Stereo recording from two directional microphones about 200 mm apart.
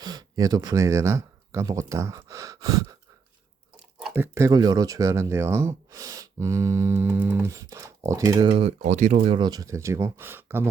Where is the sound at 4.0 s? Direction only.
10° right (ahead or behind).